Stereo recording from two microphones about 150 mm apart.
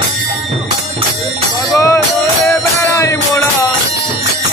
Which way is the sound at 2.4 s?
15° left (ahead or behind).